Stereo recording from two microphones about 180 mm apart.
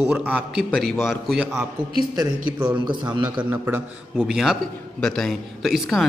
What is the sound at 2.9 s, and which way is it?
Speech, 25° right (ahead or behind).